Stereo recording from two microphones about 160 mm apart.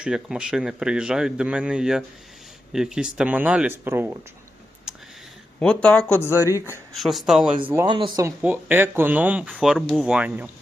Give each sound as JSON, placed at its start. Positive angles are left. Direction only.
{"t": 0.0, "sound": "speech", "side_deg": -5}
{"t": 5.5, "sound": "speech", "side_deg": 5}
{"t": 6.9, "sound": "speech", "side_deg": 0}
{"t": 7.9, "sound": "speech", "side_deg": -30}
{"t": 8.4, "sound": "speech", "side_deg": -10}